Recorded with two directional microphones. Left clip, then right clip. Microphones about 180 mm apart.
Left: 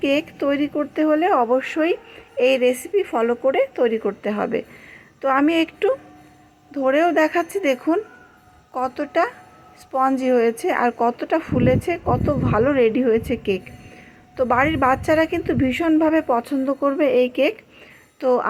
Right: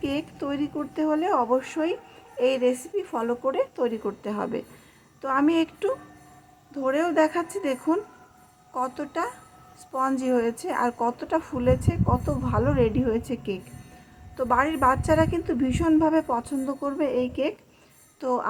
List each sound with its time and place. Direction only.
0.0 s a woman's voice: 20° left (ahead or behind)